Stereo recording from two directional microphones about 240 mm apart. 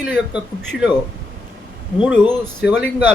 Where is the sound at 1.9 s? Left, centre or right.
Centre.